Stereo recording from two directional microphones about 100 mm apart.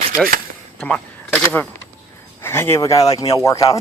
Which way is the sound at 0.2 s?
Centre (ahead or behind).